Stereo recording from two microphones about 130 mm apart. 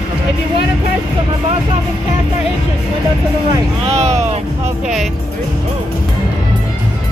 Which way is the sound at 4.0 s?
60° right (ahead or behind).